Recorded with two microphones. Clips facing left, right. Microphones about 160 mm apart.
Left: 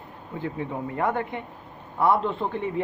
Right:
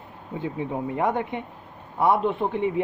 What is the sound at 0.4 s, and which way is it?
Speech, 20° right (ahead or behind).